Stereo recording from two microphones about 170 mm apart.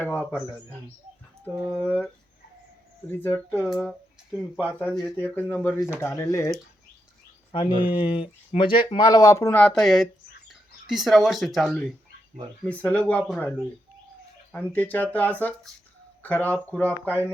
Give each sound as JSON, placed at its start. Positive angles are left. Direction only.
{"t": 0.0, "sound": "speech", "side_deg": 10}
{"t": 1.5, "sound": "speech", "side_deg": -10}
{"t": 3.1, "sound": "speech", "side_deg": 10}
{"t": 4.3, "sound": "speech", "side_deg": -5}
{"t": 5.0, "sound": "speech", "side_deg": 10}
{"t": 7.5, "sound": "speech", "side_deg": 25}
{"t": 14.5, "sound": "speech", "side_deg": 10}
{"t": 16.9, "sound": "speech", "side_deg": -15}